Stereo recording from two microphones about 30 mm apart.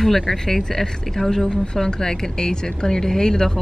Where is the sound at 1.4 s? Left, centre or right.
Left.